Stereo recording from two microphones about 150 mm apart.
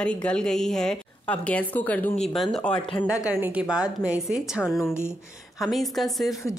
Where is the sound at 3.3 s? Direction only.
10° right (ahead or behind).